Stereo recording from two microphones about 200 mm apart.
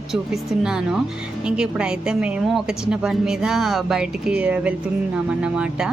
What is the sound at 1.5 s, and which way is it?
Speech, 5° right (ahead or behind).